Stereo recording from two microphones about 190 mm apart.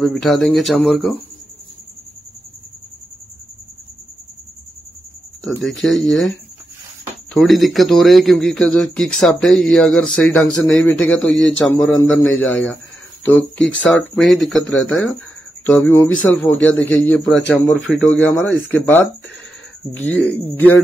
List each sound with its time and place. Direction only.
0.0 s speech: centre (ahead or behind)
5.6 s speech: centre (ahead or behind)
7.3 s speech: centre (ahead or behind)
11.1 s speech: 80° left
11.7 s speech: 10° left (ahead or behind)